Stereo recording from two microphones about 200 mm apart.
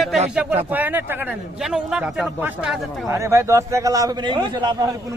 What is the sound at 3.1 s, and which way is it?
A man's voice, 15° right (ahead or behind).